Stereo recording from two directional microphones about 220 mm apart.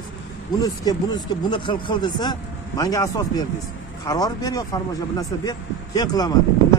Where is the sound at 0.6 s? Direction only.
15° left (ahead or behind).